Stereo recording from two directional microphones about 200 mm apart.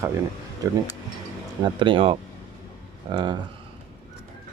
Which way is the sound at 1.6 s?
25° right (ahead or behind).